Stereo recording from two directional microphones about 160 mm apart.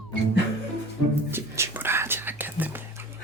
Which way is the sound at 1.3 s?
15° right (ahead or behind).